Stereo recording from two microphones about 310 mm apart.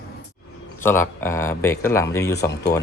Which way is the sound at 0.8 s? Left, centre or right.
Centre.